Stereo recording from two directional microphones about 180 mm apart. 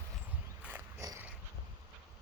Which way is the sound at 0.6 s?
15° right (ahead or behind).